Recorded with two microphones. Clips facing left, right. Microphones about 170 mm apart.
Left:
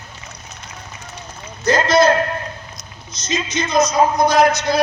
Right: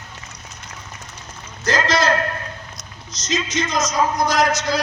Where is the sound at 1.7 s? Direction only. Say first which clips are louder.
Left 6 dB; 90° right.